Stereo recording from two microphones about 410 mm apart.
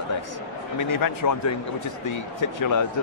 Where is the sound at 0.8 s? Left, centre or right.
Left.